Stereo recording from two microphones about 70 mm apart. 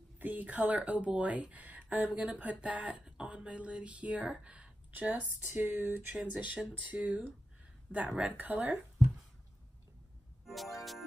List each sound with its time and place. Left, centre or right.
0.2 s speech: right
5.5 s speech: right
6.1 s speech: centre
10.4 s music: centre